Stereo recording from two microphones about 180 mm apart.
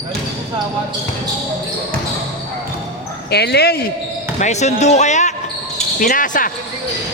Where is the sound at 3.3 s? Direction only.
65° left (ahead or behind).